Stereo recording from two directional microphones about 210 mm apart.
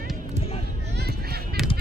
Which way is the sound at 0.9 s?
50° right (ahead or behind).